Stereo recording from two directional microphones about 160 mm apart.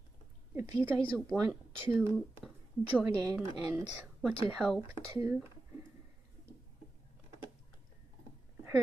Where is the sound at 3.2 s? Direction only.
20° right (ahead or behind).